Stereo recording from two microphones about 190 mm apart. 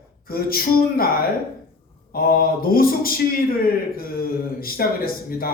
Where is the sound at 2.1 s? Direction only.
50° left (ahead or behind).